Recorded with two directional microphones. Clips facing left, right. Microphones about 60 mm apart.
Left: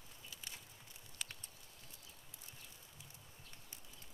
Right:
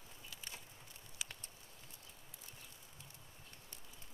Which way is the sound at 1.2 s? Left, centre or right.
Centre.